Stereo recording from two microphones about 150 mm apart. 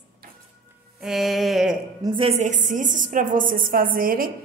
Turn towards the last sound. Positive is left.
turn(degrees=-70)  # may be behind; listen again after turning